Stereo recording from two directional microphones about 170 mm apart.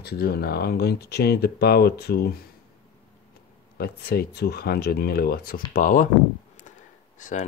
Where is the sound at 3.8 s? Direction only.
70° left (ahead or behind).